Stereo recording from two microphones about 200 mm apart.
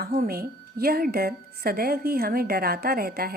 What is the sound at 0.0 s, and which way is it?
A woman's voice, 50° right (ahead or behind).